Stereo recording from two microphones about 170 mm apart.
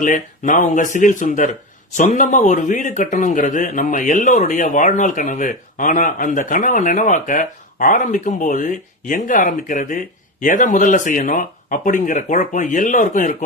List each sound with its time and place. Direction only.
0.0 s a man's voice: 50° left (ahead or behind)